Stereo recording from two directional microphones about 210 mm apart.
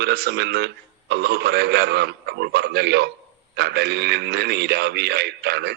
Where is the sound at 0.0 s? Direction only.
50° right (ahead or behind).